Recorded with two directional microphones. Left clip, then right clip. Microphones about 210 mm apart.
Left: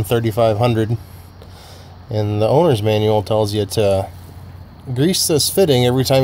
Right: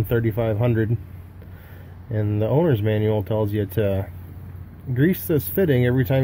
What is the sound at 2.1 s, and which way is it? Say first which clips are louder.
Speech: left 7 dB; 30° left (ahead or behind).